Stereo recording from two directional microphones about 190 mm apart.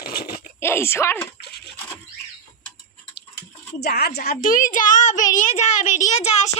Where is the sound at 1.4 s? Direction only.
60° left (ahead or behind).